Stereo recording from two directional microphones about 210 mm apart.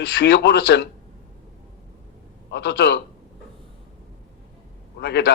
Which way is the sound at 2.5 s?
55° left (ahead or behind).